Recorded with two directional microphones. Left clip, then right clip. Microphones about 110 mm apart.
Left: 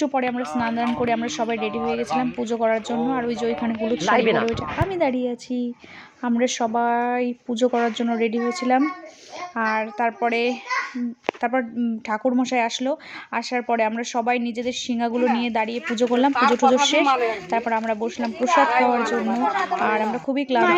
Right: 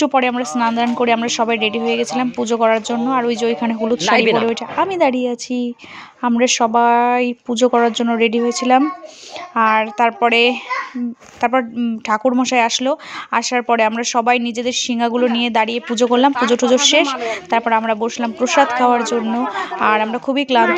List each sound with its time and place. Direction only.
0.0 s speech: 40° right (ahead or behind)
11.3 s speech: 25° right (ahead or behind)